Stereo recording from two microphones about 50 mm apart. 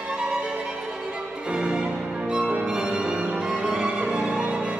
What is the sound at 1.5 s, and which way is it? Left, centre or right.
Music, centre.